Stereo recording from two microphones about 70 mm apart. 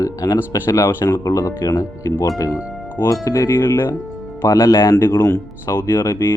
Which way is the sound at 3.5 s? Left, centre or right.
Left.